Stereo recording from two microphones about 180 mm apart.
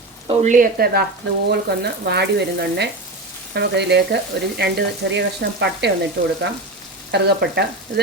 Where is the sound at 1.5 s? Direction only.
65° right (ahead or behind).